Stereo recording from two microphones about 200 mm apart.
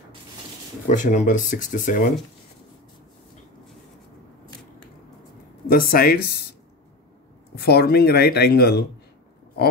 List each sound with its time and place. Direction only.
0.8 s speech: 40° left (ahead or behind)
5.7 s speech: 45° left (ahead or behind)
7.5 s speech: 55° left (ahead or behind)